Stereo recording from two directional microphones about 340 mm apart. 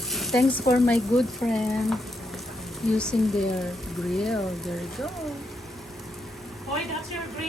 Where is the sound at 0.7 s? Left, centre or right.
Centre.